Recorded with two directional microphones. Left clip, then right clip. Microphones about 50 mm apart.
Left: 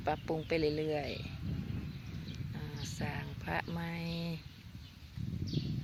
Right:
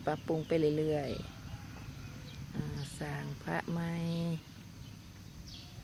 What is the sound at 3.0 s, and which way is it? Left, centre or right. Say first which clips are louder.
Speech: even; left.